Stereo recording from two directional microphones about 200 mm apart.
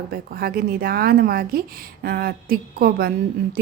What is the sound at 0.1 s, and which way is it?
Speech, 50° right (ahead or behind).